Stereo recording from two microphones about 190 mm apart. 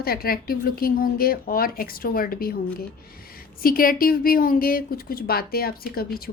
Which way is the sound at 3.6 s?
50° left (ahead or behind).